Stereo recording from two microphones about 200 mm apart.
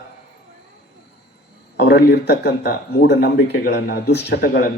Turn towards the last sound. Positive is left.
turn(degrees=50)  # may be behind; listen again after turning